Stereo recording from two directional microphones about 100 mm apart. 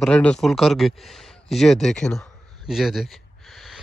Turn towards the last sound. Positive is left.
turn(degrees=-5)  # may be behind; listen again after turning